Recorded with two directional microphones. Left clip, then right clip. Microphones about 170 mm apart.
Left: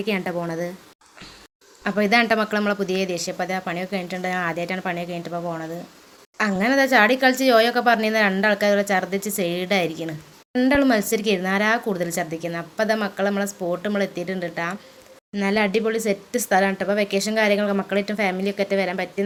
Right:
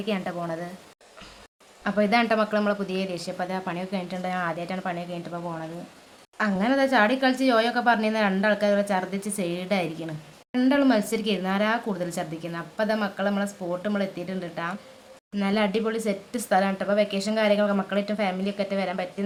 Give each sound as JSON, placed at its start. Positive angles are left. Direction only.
{"t": 0.0, "sound": "a woman's voice", "side_deg": 20}
{"t": 1.8, "sound": "speech", "side_deg": 10}